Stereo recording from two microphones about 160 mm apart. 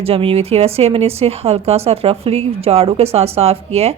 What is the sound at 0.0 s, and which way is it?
Speech, 35° right (ahead or behind).